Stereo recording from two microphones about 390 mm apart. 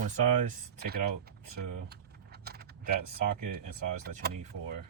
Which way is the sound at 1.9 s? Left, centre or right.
Right.